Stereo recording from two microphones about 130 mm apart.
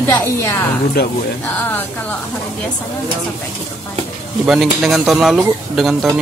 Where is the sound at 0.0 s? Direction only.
20° left (ahead or behind).